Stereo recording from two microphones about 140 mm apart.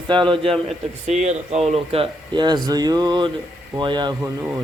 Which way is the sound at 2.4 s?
30° right (ahead or behind).